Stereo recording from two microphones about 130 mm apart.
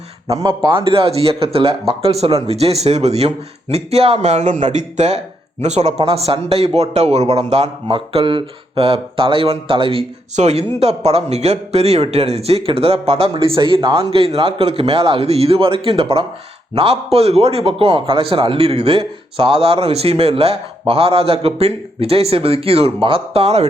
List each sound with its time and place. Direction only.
0.3 s speech: 30° right (ahead or behind); by 7.7 s 55° right (ahead or behind)
7.9 s speech: 40° right (ahead or behind)
10.3 s speech: 60° right (ahead or behind)